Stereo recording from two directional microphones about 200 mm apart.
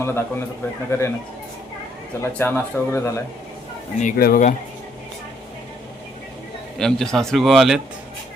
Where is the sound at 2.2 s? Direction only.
10° left (ahead or behind).